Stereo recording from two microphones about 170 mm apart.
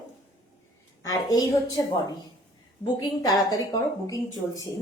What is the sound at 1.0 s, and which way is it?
A woman's voice, 20° left (ahead or behind).